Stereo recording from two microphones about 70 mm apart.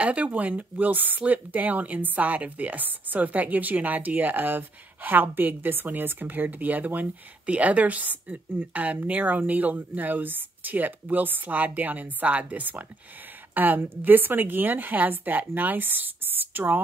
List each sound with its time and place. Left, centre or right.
0.0 s speech: centre